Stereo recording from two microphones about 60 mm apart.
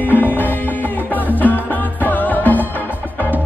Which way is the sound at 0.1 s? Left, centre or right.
Left.